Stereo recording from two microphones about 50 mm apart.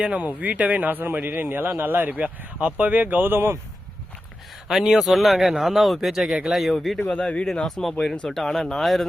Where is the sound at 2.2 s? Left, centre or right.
Right.